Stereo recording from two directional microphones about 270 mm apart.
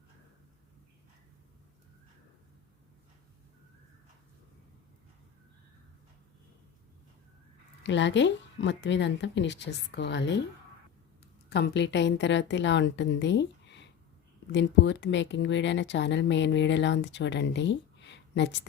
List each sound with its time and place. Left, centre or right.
7.9 s speech: left
11.4 s speech: left